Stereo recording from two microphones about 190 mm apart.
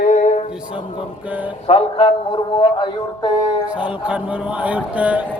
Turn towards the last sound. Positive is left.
turn(degrees=-5)  # may be behind; listen again after turning